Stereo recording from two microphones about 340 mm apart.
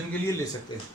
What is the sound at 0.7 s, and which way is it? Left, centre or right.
Speech, centre.